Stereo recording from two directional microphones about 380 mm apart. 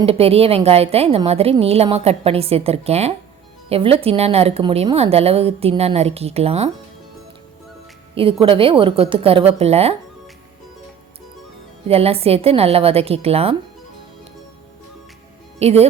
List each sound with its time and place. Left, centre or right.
0.0 s a woman's voice: centre
8.1 s a woman's voice: centre
11.9 s a woman's voice: centre
15.5 s speech: centre